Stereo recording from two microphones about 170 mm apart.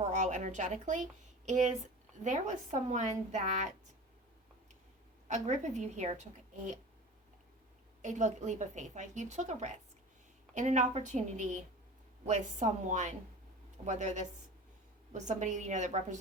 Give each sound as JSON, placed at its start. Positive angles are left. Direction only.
{"t": 0.1, "sound": "a woman's voice", "side_deg": -45}
{"t": 5.3, "sound": "a woman's voice", "side_deg": -45}
{"t": 8.0, "sound": "a woman's voice", "side_deg": -45}